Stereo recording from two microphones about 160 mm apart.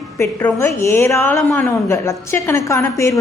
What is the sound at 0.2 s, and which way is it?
A woman's voice, 15° left (ahead or behind).